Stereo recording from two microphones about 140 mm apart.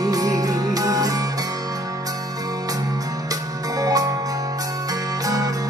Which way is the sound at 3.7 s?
25° right (ahead or behind).